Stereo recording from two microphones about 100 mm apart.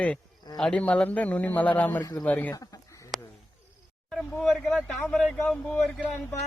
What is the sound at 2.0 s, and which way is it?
Speech, 35° left (ahead or behind).